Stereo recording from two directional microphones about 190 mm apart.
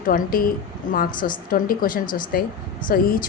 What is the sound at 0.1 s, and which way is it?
A woman's voice, 50° left (ahead or behind).